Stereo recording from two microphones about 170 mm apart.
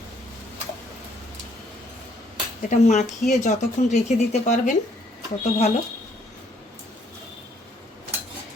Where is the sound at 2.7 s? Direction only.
45° left (ahead or behind).